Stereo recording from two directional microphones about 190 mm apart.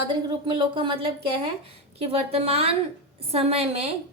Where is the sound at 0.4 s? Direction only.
25° right (ahead or behind).